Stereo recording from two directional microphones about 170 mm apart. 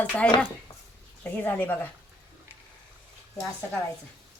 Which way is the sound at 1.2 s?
10° left (ahead or behind).